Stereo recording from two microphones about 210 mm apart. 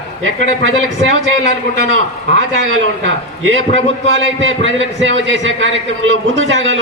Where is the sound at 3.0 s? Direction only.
65° right (ahead or behind).